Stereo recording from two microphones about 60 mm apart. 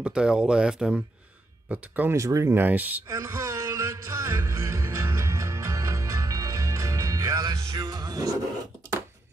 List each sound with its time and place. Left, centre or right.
0.0 s speech: centre
2.1 s speech: right
2.5 s speech: right
3.1 s music: right